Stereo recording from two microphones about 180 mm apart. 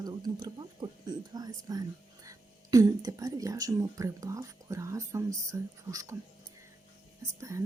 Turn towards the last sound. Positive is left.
turn(degrees=-15)  # may be behind; listen again after turning